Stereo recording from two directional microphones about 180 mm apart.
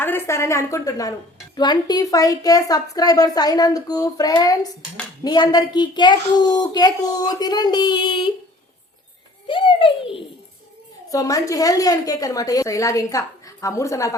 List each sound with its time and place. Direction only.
0.0 s a woman's voice: 10° left (ahead or behind)
9.5 s a woman's voice: 25° left (ahead or behind)
11.1 s a woman's voice: 20° left (ahead or behind)